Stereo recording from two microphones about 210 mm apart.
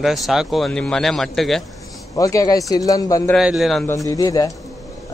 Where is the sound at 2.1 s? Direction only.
15° left (ahead or behind).